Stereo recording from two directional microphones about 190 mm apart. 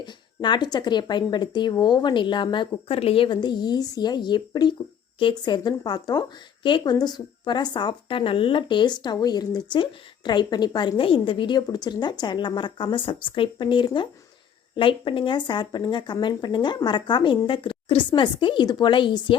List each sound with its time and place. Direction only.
0.0 s speech: 25° left (ahead or behind)